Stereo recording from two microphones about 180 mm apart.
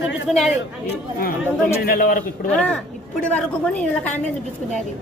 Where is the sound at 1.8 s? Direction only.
55° left (ahead or behind).